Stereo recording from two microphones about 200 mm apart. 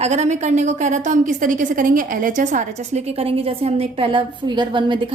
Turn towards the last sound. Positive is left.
turn(degrees=-20)  # may be behind; listen again after turning